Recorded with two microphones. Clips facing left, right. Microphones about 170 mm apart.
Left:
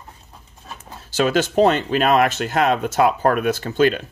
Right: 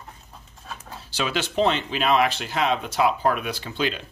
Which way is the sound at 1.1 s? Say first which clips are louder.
Left 9 dB; 45° left (ahead or behind).